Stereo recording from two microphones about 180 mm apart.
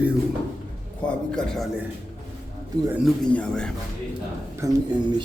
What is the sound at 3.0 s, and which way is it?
Speech, 5° left (ahead or behind).